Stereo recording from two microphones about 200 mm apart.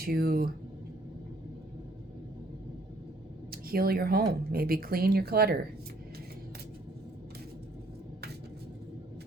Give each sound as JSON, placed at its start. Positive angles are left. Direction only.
{"t": 0.0, "sound": "speech", "side_deg": -50}
{"t": 3.5, "sound": "speech", "side_deg": -50}